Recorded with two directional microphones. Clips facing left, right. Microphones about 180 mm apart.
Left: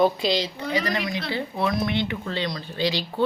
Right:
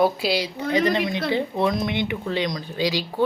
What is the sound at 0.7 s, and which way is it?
Speech, 25° right (ahead or behind).